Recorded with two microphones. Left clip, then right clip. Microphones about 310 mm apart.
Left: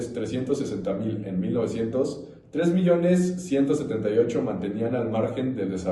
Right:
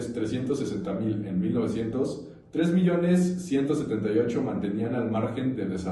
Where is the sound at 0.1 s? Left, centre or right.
Centre.